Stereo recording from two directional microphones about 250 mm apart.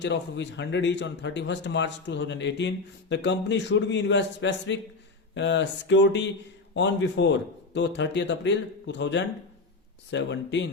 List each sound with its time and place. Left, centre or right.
0.0 s speech: left